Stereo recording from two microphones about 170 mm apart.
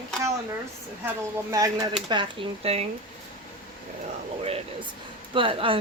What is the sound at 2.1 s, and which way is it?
Speech, 30° right (ahead or behind).